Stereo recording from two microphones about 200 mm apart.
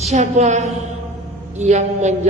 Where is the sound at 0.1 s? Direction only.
35° right (ahead or behind).